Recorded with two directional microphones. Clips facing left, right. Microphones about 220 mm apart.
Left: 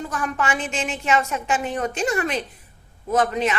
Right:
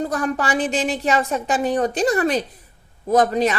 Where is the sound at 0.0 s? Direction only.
35° right (ahead or behind).